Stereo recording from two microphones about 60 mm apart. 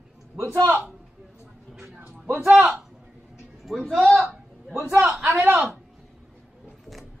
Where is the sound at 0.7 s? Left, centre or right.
Right.